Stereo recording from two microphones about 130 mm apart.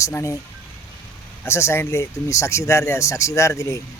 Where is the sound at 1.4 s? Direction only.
20° left (ahead or behind).